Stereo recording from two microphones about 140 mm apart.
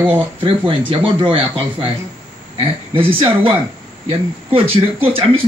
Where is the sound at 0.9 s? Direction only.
40° right (ahead or behind).